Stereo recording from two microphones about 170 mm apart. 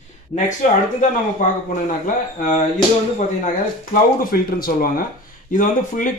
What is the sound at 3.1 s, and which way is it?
Speech, 50° left (ahead or behind).